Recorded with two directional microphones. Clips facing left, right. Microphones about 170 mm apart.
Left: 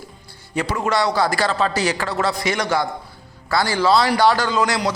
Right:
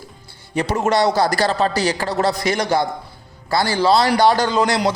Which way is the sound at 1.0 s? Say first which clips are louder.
Right 2 dB; 40° right (ahead or behind).